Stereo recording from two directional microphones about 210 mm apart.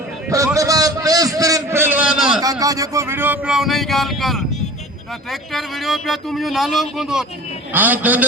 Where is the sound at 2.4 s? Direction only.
15° right (ahead or behind).